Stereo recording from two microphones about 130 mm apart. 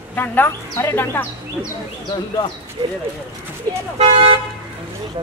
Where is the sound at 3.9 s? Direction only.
50° right (ahead or behind).